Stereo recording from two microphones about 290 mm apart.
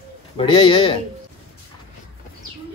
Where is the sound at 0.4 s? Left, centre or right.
Centre.